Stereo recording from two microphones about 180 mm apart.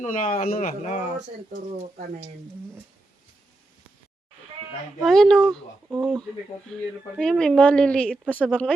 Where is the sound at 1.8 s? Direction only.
40° right (ahead or behind).